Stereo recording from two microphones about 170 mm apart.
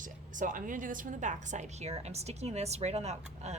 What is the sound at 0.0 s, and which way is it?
A woman's voice, 50° right (ahead or behind).